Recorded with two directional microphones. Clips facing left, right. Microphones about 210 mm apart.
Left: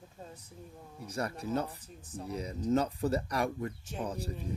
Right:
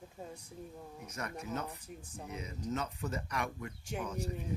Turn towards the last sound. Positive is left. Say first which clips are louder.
# left 1 dB
turn(degrees=35)  # may be behind; listen again after turning